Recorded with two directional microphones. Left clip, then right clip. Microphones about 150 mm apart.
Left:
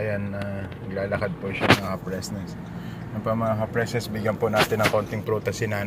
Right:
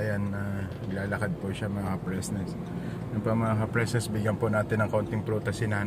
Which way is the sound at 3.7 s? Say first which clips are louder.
Left 3 dB; 25° right (ahead or behind).